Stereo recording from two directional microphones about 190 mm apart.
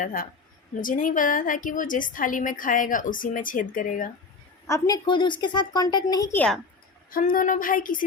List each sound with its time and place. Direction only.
0.0 s a woman's voice: 45° left (ahead or behind)
4.6 s a woman's voice: 20° left (ahead or behind)
7.1 s a woman's voice: 45° left (ahead or behind)